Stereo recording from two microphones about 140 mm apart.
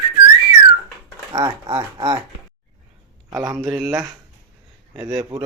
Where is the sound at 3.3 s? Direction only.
25° right (ahead or behind).